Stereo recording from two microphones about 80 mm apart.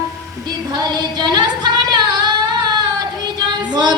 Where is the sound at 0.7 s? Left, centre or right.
Right.